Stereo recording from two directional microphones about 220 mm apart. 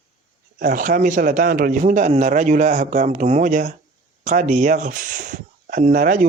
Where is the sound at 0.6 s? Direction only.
35° right (ahead or behind).